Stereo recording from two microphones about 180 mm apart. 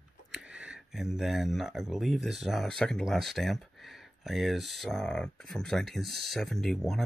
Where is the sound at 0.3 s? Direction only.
5° right (ahead or behind).